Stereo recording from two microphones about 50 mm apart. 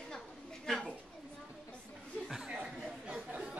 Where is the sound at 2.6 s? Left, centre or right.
Centre.